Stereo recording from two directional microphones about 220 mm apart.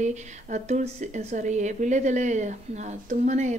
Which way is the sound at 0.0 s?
30° right (ahead or behind).